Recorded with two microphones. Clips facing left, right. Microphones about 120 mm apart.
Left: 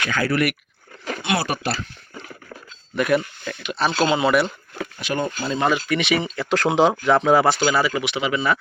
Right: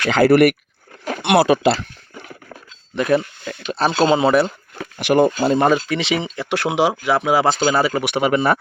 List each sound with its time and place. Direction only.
0.1 s speech: 85° right
2.9 s speech: 25° right (ahead or behind)
3.6 s speech: 35° right (ahead or behind)
4.9 s speech: 70° right (ahead or behind)
5.5 s speech: 50° right (ahead or behind)
5.7 s speech: 30° right (ahead or behind); by 7.4 s 10° right (ahead or behind)
7.6 s speech: 30° right (ahead or behind)
8.0 s speech: 50° right (ahead or behind)